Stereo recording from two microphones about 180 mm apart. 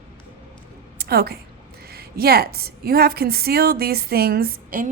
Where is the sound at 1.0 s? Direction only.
60° right (ahead or behind).